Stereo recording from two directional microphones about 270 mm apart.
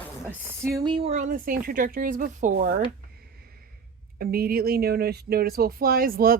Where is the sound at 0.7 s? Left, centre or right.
Centre.